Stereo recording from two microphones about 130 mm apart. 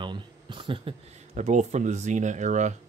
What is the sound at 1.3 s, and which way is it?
Speech, 60° right (ahead or behind).